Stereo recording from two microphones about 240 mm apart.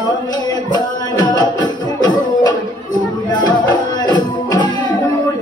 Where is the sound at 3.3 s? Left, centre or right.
Centre.